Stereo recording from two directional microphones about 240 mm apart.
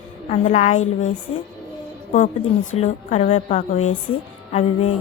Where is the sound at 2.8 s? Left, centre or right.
Left.